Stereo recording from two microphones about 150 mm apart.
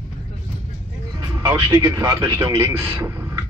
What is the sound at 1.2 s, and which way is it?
A man's voice, 25° right (ahead or behind).